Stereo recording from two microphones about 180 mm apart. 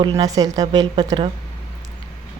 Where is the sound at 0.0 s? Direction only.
20° right (ahead or behind).